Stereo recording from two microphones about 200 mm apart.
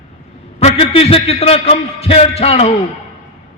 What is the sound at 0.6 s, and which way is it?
A man's voice, 30° left (ahead or behind).